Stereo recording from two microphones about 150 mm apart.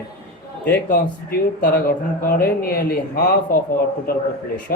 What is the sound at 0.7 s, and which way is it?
Speech, 90° left.